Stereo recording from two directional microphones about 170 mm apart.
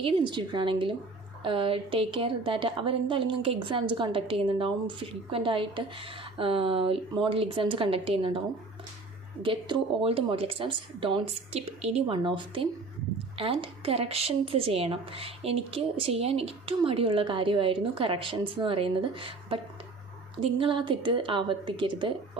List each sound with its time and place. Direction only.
0.0 s a woman's voice: 30° right (ahead or behind)
9.4 s a woman's voice: 30° right (ahead or behind)